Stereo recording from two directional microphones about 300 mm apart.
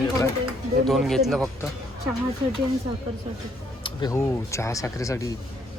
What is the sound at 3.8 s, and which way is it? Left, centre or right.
Speech, centre.